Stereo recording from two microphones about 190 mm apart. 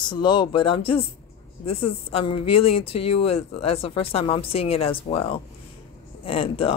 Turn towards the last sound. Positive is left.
turn(degrees=30)  # may be behind; listen again after turning